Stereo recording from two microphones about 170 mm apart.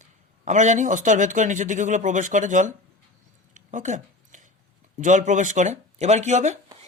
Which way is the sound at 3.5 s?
45° right (ahead or behind).